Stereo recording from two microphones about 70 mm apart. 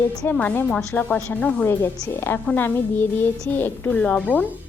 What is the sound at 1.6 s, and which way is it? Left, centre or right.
A woman's voice, left.